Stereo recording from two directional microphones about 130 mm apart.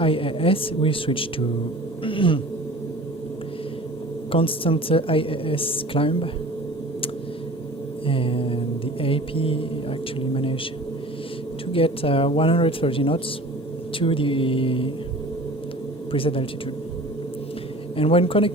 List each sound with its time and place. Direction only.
0.0 s a woman's voice: 45° left (ahead or behind)
2.0 s a sound: 40° left (ahead or behind)
4.3 s a woman's voice: 45° left (ahead or behind)
8.0 s a woman's voice: 45° left (ahead or behind)
11.7 s a woman's voice: 45° left (ahead or behind)
16.1 s a woman's voice: 45° left (ahead or behind)
17.9 s a woman's voice: 45° left (ahead or behind)